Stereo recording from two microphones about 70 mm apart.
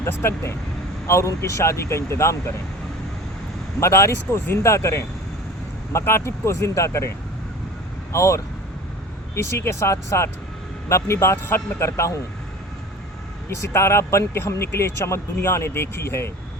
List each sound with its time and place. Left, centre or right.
0.0 s a man's voice: left
3.8 s a man's voice: left
8.1 s a man's voice: left
13.7 s a man's voice: left